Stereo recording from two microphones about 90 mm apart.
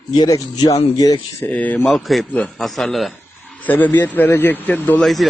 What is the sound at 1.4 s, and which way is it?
Speech, 15° left (ahead or behind).